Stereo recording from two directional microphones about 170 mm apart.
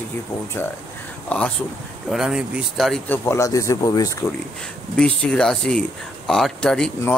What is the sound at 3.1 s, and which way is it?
Speech, 15° left (ahead or behind).